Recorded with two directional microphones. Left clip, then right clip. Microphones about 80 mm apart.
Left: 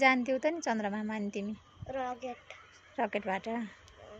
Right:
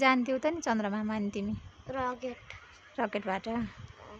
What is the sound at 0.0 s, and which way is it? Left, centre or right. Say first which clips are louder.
A woman's voice: even; centre.